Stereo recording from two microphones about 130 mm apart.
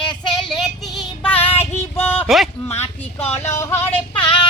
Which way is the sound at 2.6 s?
15° left (ahead or behind).